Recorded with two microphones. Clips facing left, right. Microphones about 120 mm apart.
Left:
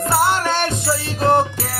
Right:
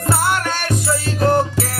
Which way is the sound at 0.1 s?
25° left (ahead or behind).